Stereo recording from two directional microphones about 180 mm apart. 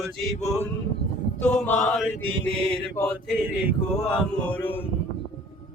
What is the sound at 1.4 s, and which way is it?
Chant, 5° left (ahead or behind).